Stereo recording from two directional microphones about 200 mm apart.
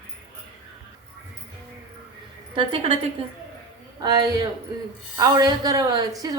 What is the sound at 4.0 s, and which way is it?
A woman's voice, 15° right (ahead or behind).